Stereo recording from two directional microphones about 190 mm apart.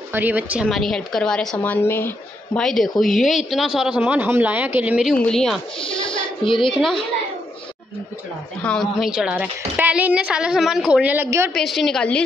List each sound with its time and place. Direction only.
0.1 s a woman's voice: 10° right (ahead or behind)
5.8 s music: 25° left (ahead or behind)
6.8 s a woman's voice: 5° left (ahead or behind)
8.6 s a woman's voice: centre (ahead or behind); by 11.5 s 15° right (ahead or behind)
11.5 s a woman's voice: centre (ahead or behind)